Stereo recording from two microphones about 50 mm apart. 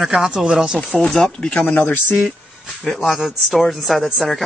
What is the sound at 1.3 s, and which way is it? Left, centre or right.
Speech, centre.